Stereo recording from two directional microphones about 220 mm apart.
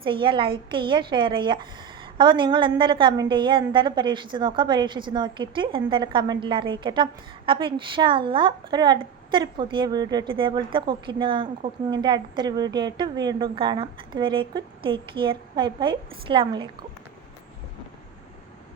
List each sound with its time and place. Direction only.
0.0 s a woman's voice: 25° right (ahead or behind)